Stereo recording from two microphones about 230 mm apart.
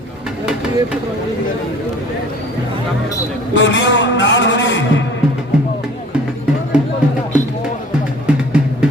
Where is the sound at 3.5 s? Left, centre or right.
Left.